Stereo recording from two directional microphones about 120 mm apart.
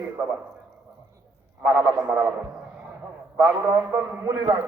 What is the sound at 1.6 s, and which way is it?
Speech, 25° right (ahead or behind).